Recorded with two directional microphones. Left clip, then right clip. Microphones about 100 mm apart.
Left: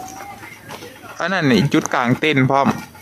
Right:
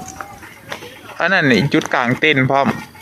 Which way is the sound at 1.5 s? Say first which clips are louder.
Right 2 dB; 25° left (ahead or behind).